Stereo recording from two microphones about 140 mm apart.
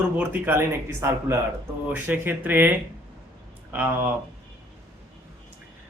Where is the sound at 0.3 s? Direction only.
15° right (ahead or behind).